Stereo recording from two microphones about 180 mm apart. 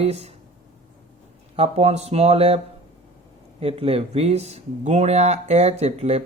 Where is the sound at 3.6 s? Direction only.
35° right (ahead or behind).